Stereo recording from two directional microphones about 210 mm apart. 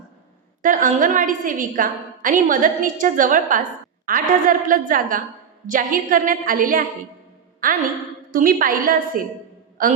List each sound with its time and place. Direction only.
0.6 s a woman's voice: 40° right (ahead or behind)
8.3 s a woman's voice: 40° right (ahead or behind)